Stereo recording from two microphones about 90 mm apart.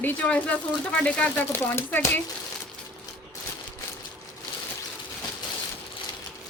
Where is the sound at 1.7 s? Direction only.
30° left (ahead or behind).